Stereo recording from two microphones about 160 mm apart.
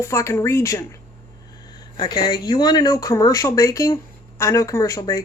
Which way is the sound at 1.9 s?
30° left (ahead or behind).